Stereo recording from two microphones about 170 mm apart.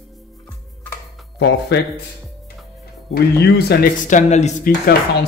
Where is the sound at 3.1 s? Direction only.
70° left (ahead or behind).